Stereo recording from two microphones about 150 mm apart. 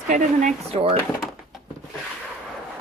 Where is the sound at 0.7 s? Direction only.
40° right (ahead or behind).